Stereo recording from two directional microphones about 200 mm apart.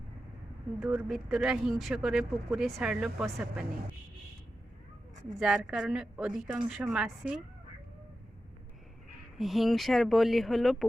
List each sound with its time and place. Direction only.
0.8 s speech: centre (ahead or behind)
5.4 s speech: 5° right (ahead or behind)
9.4 s speech: centre (ahead or behind)